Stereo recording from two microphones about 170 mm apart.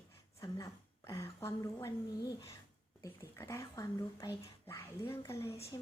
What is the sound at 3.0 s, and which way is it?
A woman's voice, 15° left (ahead or behind).